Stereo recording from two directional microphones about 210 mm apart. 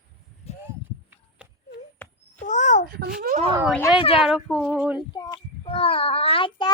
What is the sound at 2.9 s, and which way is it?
Speech, 45° right (ahead or behind).